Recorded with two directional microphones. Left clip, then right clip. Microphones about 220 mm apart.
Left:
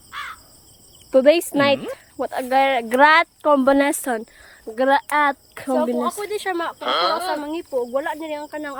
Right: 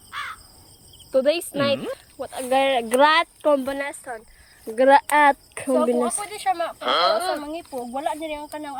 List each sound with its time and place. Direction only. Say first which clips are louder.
0.1 s caw: even; centre (ahead or behind)
1.1 s speech: left 6 dB; 15° left (ahead or behind)
3.8 s speech: left 10 dB; 35° left (ahead or behind)
4.7 s speech: right 2 dB; centre (ahead or behind)
6.7 s speech: even; centre (ahead or behind)
7.5 s speech: left 7 dB; 10° left (ahead or behind)